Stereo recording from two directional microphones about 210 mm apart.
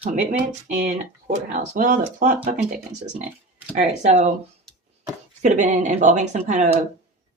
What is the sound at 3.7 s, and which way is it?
Speech, 35° right (ahead or behind).